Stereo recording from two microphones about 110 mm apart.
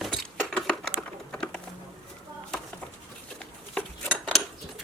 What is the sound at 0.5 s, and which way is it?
Typing, 10° left (ahead or behind).